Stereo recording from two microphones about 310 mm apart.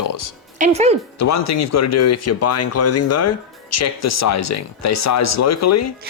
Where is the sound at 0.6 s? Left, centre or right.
Right.